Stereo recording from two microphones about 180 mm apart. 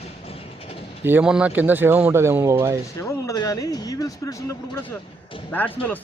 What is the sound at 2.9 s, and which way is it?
Speech, 15° left (ahead or behind).